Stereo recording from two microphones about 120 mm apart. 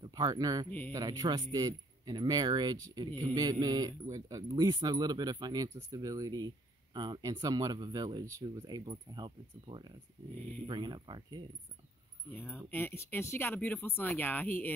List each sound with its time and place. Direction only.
0.0 s a man's voice: 35° right (ahead or behind)
0.7 s speech: 15° left (ahead or behind)
0.9 s speech: 35° right (ahead or behind)
12.4 s speech: 15° left (ahead or behind)